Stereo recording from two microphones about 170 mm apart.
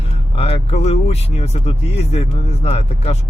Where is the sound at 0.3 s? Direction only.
35° left (ahead or behind).